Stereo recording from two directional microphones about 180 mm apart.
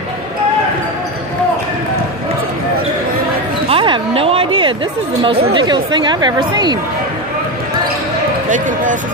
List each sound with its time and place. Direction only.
3.6 s a sound: 30° right (ahead or behind)
5.5 s speech: 25° right (ahead or behind)
8.5 s speech: 45° right (ahead or behind)